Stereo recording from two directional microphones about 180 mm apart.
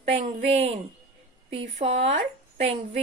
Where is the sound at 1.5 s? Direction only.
90° right.